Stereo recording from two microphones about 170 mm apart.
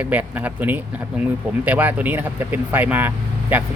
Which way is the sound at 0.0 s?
10° right (ahead or behind).